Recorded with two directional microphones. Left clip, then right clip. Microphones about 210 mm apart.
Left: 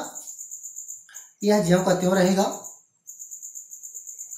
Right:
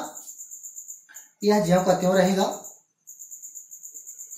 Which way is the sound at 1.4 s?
25° left (ahead or behind).